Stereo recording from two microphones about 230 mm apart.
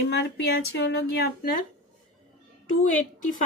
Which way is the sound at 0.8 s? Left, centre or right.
Left.